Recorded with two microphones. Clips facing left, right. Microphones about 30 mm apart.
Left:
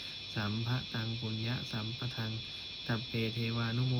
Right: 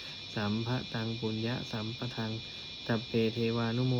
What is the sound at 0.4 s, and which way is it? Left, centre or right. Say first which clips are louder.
Speech: right 5 dB; left.